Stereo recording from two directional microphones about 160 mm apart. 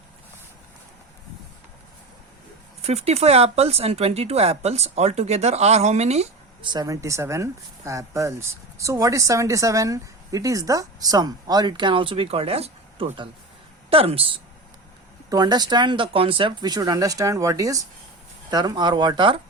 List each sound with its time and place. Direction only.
2.8 s speech: 40° right (ahead or behind)
6.7 s speech: 25° right (ahead or behind)
15.3 s speech: 25° right (ahead or behind)